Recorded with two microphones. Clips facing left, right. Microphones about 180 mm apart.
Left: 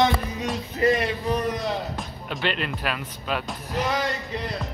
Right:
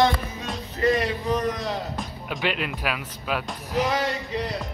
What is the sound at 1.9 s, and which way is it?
Speech, 5° right (ahead or behind).